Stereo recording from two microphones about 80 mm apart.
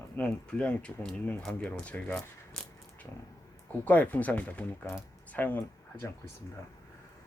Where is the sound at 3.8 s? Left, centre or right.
Centre.